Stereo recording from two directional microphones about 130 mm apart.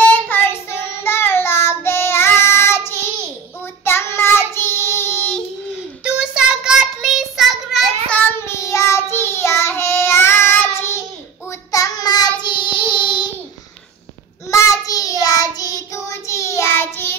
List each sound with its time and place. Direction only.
0.0 s child singing: 15° left (ahead or behind)
6.0 s child singing: 5° right (ahead or behind)
8.1 s child singing: 20° left (ahead or behind)
11.7 s child singing: 30° left (ahead or behind)
14.5 s child singing: 25° left (ahead or behind)